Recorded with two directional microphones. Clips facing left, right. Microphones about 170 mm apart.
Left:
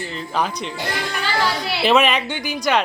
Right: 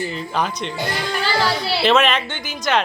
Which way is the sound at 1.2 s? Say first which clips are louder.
Right 1 dB; 35° right (ahead or behind).